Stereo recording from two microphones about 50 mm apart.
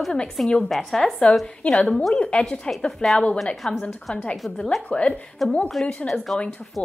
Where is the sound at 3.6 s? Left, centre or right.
Left.